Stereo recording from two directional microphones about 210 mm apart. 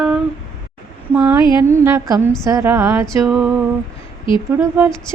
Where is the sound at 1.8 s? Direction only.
15° right (ahead or behind).